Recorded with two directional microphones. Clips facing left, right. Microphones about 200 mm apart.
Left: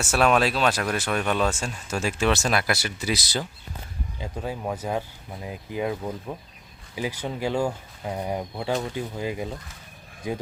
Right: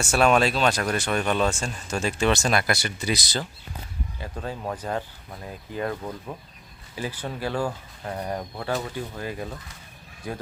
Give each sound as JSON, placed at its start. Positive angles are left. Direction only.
{"t": 0.0, "sound": "speech", "side_deg": 5}